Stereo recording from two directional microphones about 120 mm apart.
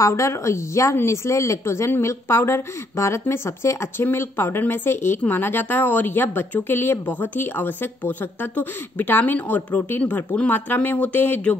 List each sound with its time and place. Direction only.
0.0 s a woman's voice: 25° left (ahead or behind)